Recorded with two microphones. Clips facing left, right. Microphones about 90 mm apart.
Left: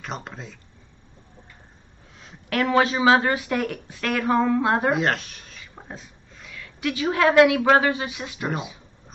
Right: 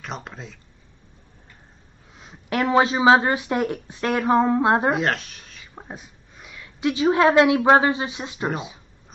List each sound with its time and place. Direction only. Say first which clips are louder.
0.0 s speech: even; centre (ahead or behind)
2.1 s speech: right 1 dB; 20° right (ahead or behind)
4.9 s speech: even; centre (ahead or behind)
5.8 s speech: right 2 dB; 15° right (ahead or behind)